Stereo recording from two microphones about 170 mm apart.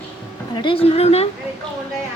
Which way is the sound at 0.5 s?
30° left (ahead or behind).